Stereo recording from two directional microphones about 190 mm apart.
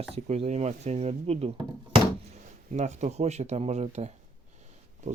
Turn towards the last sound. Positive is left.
turn(degrees=-35)  # may be behind; listen again after turning